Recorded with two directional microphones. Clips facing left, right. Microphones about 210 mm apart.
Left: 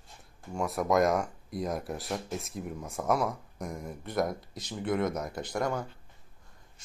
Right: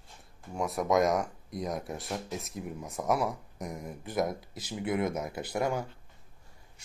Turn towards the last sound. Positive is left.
turn(degrees=-5)  # may be behind; listen again after turning